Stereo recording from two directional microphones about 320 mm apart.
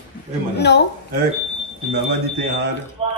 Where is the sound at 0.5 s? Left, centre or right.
Left.